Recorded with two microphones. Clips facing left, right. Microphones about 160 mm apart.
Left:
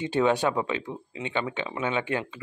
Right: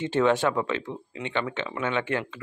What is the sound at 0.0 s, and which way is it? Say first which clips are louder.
Speech: right 1 dB; 15° left (ahead or behind).